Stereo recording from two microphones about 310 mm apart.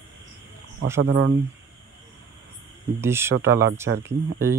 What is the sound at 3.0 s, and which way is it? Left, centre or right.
Speech, centre.